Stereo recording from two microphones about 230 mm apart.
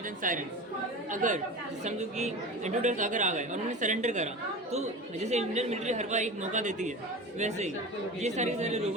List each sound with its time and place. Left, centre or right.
0.2 s a woman's voice: right